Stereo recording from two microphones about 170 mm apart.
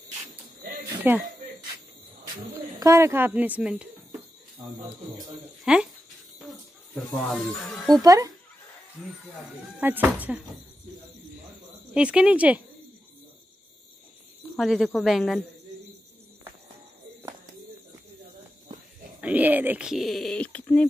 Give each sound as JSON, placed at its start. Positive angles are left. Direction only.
{"t": 1.0, "sound": "speech", "side_deg": -10}
{"t": 2.8, "sound": "speech", "side_deg": -15}
{"t": 5.7, "sound": "speech", "side_deg": -5}
{"t": 7.2, "sound": "speech", "side_deg": 0}
{"t": 8.0, "sound": "speech", "side_deg": -20}
{"t": 9.8, "sound": "speech", "side_deg": -10}
{"t": 11.9, "sound": "speech", "side_deg": -5}
{"t": 14.6, "sound": "speech", "side_deg": 0}
{"t": 19.2, "sound": "speech", "side_deg": -10}